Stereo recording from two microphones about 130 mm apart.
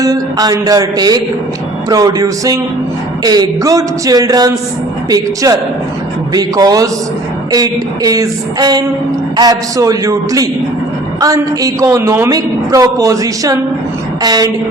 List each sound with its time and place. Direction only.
0.0 s a woman's voice: 30° right (ahead or behind)